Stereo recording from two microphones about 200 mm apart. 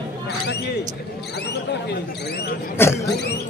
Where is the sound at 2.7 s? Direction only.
10° left (ahead or behind).